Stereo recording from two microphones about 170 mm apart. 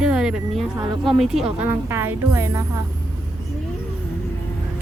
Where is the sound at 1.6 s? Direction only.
15° right (ahead or behind).